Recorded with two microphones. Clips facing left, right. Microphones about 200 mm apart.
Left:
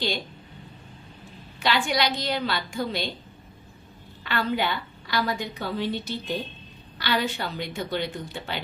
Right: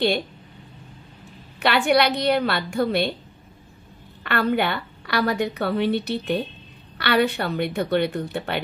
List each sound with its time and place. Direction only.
1.6 s a woman's voice: 65° right (ahead or behind)
4.2 s a woman's voice: 60° right (ahead or behind)